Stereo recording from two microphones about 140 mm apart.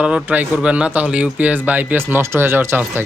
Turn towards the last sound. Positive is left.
turn(degrees=-15)  # may be behind; listen again after turning